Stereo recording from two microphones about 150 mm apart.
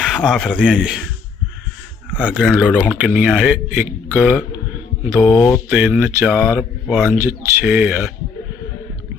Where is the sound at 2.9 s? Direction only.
10° right (ahead or behind).